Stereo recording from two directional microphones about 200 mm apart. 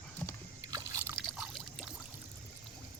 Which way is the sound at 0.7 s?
15° right (ahead or behind).